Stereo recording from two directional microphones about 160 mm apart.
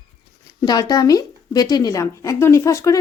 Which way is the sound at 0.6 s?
25° left (ahead or behind).